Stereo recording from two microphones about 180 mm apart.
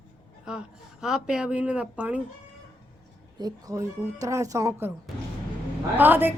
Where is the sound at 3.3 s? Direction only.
20° right (ahead or behind).